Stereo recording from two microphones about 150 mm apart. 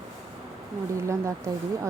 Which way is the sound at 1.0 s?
20° right (ahead or behind).